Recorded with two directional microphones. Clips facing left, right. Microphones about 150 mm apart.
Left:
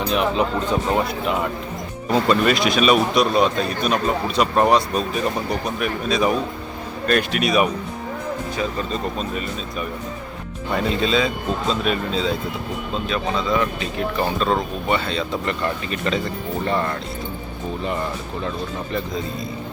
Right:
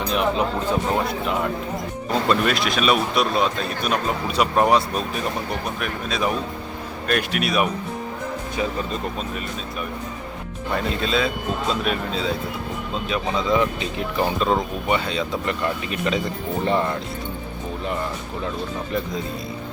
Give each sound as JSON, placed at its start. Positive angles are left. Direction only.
{"t": 0.1, "sound": "speech", "side_deg": 0}
{"t": 2.2, "sound": "speech", "side_deg": 0}
{"t": 10.8, "sound": "speech", "side_deg": 0}
{"t": 13.1, "sound": "speech", "side_deg": -15}